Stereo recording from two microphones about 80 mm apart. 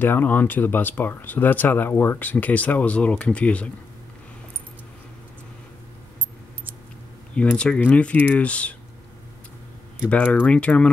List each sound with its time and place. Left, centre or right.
0.0 s speech: left
7.5 s speech: centre
10.0 s speech: left